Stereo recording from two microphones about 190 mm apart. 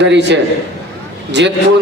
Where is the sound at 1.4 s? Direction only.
65° right (ahead or behind).